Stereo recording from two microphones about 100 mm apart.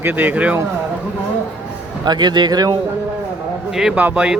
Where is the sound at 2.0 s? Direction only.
45° right (ahead or behind).